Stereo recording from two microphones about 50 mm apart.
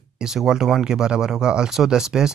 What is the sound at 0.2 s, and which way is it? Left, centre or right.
Speech, centre.